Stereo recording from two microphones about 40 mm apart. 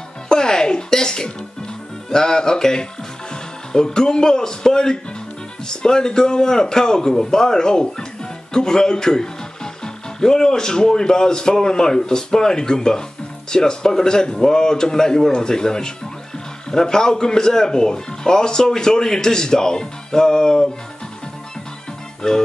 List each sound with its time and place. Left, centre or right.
0.3 s music: centre
2.0 s speech: centre
22.2 s speech: centre